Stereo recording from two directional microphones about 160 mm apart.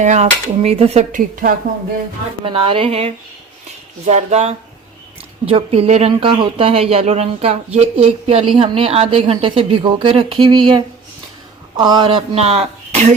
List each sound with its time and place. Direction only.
0.0 s speech: 45° right (ahead or behind)
2.4 s speech: 35° right (ahead or behind)
11.8 s speech: 25° right (ahead or behind); by 13.1 s 45° right (ahead or behind)